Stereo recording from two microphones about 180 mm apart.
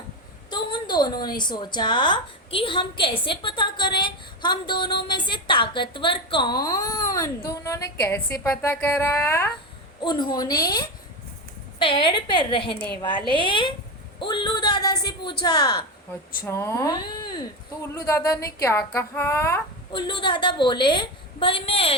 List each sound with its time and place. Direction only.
0.5 s a sound: 25° left (ahead or behind)
1.4 s a woman's voice: 25° left (ahead or behind)
10.0 s a woman's voice: 25° left (ahead or behind)
19.9 s a woman's voice: 25° left (ahead or behind)